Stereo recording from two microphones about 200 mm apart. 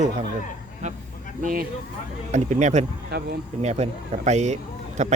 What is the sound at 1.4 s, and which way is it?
A man's voice, 40° right (ahead or behind).